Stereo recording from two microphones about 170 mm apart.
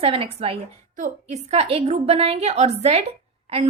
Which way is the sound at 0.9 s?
45° right (ahead or behind).